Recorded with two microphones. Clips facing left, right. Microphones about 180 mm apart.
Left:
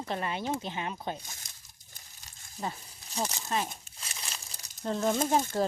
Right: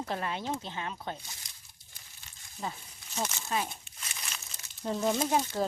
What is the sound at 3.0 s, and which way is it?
Speech, 35° left (ahead or behind).